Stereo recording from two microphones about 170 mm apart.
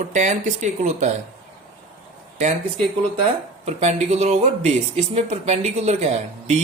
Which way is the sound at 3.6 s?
40° right (ahead or behind).